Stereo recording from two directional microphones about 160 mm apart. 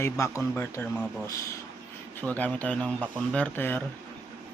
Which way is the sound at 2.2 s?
10° left (ahead or behind).